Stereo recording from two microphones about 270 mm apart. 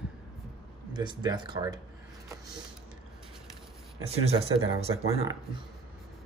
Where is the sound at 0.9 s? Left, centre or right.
Centre.